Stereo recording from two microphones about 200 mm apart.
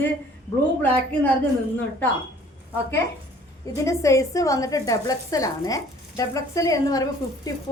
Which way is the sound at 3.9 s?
15° left (ahead or behind).